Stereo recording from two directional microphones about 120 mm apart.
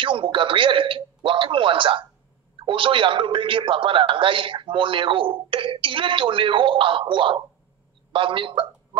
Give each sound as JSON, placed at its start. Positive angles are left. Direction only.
{"t": 0.0, "sound": "a man's voice", "side_deg": -45}